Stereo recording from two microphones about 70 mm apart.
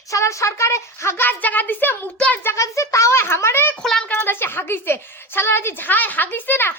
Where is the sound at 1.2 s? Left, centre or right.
Left.